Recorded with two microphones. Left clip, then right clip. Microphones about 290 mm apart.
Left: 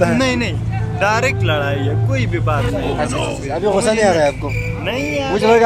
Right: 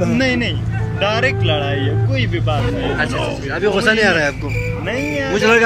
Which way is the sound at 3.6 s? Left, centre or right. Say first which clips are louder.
Even; left.